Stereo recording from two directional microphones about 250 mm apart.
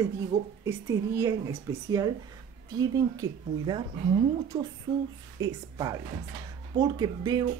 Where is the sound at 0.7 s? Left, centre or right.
Centre.